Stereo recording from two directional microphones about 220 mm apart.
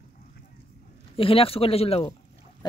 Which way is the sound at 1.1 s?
25° left (ahead or behind).